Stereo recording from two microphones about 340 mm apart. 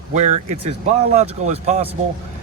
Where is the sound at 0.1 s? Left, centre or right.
Centre.